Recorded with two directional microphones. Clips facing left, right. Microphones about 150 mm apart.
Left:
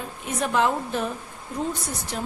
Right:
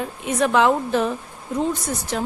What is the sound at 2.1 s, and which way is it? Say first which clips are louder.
Speech: right 6 dB; 90° right.